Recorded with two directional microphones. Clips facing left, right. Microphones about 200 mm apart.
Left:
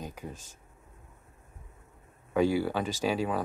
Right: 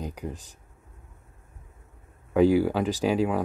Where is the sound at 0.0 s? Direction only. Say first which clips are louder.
Right 6 dB; 15° right (ahead or behind).